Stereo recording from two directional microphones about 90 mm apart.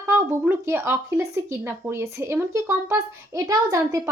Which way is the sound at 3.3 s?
40° right (ahead or behind).